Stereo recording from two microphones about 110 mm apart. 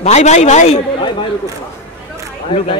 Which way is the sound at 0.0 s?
90° left.